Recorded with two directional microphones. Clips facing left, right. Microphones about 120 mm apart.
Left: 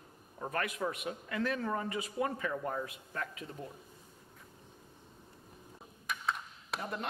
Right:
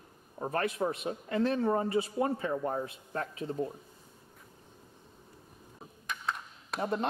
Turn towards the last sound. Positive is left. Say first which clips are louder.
# right 2 dB
turn(degrees=0)  # may be behind; listen again after turning